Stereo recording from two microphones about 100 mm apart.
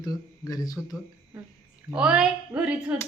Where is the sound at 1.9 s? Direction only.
10° right (ahead or behind).